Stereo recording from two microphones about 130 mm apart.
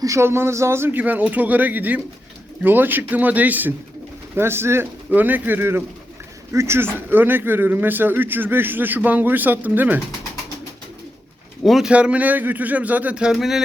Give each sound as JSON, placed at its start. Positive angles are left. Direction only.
{"t": 0.0, "sound": "a man's voice", "side_deg": -20}
{"t": 11.6, "sound": "a man's voice", "side_deg": 0}